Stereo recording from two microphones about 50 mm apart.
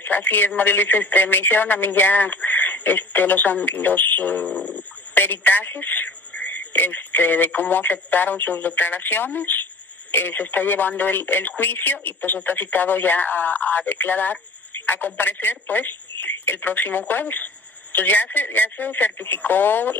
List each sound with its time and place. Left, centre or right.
0.0 s speech: left
5.1 s speech: left